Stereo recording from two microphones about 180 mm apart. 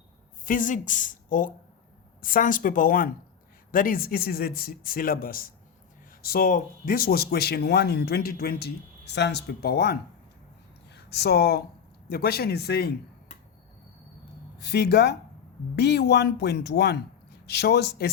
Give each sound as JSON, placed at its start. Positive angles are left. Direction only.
{"t": 0.4, "sound": "a man's voice", "side_deg": 45}
{"t": 14.6, "sound": "speech", "side_deg": 65}